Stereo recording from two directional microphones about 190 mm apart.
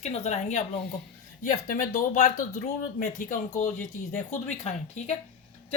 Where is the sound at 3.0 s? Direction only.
40° left (ahead or behind).